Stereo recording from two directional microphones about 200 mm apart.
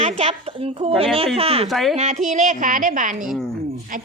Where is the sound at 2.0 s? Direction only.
35° right (ahead or behind).